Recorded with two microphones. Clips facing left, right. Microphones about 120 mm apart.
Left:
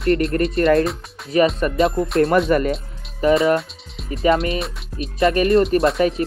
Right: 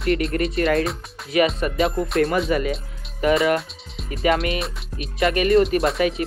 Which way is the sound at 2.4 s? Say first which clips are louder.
Left 4 dB; 50° left (ahead or behind).